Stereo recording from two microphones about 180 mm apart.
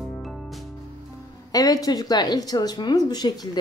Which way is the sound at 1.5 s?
20° left (ahead or behind).